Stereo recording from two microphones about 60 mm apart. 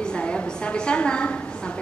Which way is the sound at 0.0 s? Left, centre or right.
Centre.